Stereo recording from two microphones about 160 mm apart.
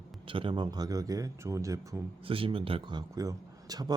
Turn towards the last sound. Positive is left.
turn(degrees=-25)  # may be behind; listen again after turning